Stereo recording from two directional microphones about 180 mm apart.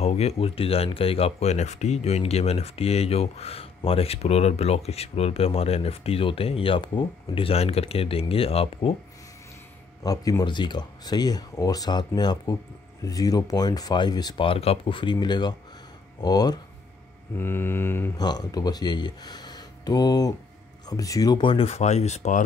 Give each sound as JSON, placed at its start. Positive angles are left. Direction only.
{"t": 0.0, "sound": "speech", "side_deg": 35}
{"t": 10.0, "sound": "speech", "side_deg": 20}
{"t": 17.4, "sound": "mantra", "side_deg": 10}
{"t": 18.2, "sound": "speech", "side_deg": 20}